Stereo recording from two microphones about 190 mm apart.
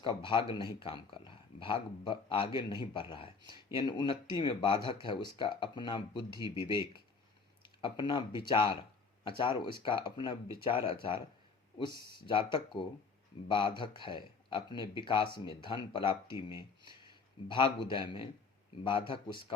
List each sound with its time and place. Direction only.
0.0 s speech: 25° left (ahead or behind)
7.8 s speech: 25° left (ahead or behind)
11.9 s speech: 60° right (ahead or behind)
12.2 s speech: 25° left (ahead or behind)